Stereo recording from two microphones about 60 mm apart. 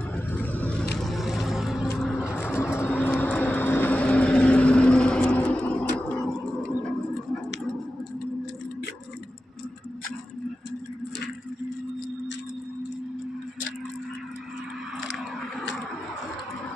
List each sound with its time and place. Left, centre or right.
0.1 s vehicle: left
0.9 s vehicle: centre
2.4 s train: left
2.9 s vehicle: left
3.6 s vehicle: left
3.9 s vehicle: left